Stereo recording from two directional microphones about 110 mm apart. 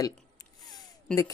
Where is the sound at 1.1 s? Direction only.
10° left (ahead or behind).